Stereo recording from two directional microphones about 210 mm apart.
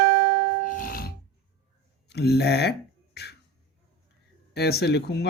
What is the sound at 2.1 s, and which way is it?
Speech, 50° left (ahead or behind).